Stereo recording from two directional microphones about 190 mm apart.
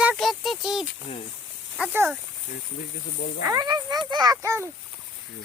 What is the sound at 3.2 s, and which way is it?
Speech, 60° left (ahead or behind).